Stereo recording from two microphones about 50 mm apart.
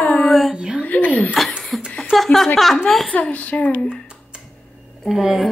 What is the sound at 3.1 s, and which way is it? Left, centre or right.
Speech, left.